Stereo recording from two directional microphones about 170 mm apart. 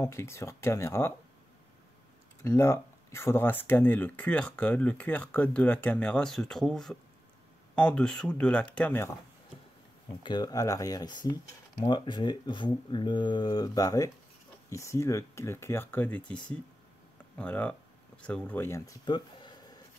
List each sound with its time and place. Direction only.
0.0 s speech: 15° left (ahead or behind)
2.4 s speech: 15° left (ahead or behind)
10.2 s speech: 25° left (ahead or behind)
19.0 s a sound: 25° left (ahead or behind)